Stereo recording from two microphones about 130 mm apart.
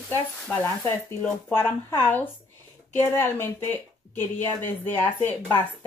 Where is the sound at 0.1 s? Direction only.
20° left (ahead or behind).